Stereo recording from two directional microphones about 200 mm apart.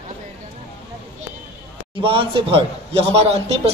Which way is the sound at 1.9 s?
25° right (ahead or behind).